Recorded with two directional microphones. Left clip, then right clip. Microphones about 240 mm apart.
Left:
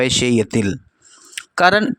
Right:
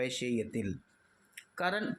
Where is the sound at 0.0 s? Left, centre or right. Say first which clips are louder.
Left 18 dB; left.